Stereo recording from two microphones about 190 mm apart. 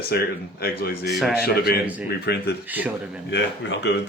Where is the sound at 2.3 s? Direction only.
60° left (ahead or behind).